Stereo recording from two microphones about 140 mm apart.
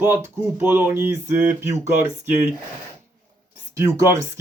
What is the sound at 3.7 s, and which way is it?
Speech, 20° right (ahead or behind).